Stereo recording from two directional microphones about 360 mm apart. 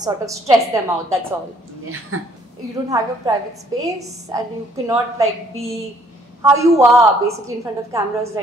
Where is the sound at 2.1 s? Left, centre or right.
Right.